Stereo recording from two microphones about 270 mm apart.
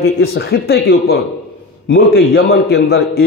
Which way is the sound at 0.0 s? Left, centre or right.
Left.